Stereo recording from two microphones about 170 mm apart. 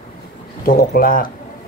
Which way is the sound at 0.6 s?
60° left (ahead or behind).